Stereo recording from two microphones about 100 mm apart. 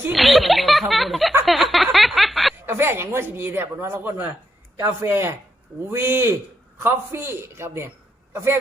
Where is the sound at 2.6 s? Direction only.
25° right (ahead or behind).